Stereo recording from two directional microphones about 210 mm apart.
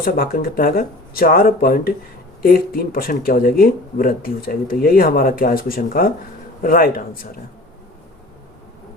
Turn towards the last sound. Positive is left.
turn(degrees=45)  # may be behind; listen again after turning